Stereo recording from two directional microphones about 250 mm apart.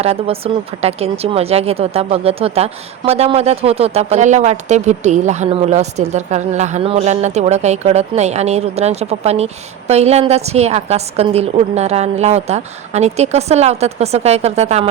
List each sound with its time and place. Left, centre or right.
0.0 s speech: right